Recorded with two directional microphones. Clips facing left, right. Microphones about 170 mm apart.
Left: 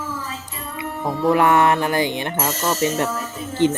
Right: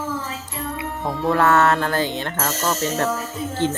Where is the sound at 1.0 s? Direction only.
15° left (ahead or behind).